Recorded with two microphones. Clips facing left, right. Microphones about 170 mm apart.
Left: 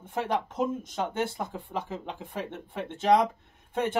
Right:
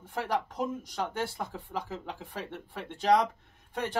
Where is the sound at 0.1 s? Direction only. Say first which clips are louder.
Left 2 dB; 20° left (ahead or behind).